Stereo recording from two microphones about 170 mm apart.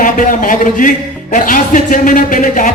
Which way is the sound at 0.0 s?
50° left (ahead or behind).